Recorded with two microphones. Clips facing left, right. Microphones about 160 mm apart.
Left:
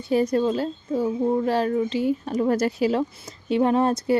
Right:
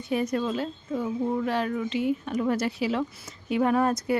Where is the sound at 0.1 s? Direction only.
35° left (ahead or behind).